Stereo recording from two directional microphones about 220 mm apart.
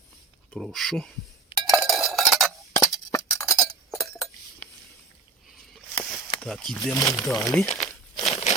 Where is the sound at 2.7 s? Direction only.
15° left (ahead or behind).